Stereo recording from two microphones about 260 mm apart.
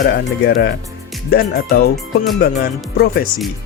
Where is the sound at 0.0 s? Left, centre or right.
Left.